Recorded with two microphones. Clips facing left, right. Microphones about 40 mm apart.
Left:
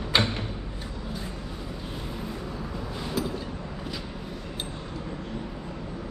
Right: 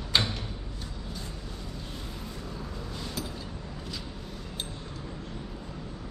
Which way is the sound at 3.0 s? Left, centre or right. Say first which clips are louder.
Left 8 dB; centre.